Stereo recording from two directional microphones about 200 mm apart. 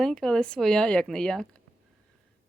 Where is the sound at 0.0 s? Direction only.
5° left (ahead or behind).